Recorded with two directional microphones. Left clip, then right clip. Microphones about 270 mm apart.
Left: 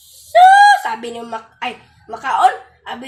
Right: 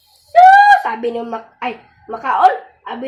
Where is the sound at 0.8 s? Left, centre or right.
Left.